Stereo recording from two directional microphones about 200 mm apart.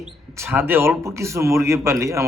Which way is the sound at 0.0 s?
10° right (ahead or behind).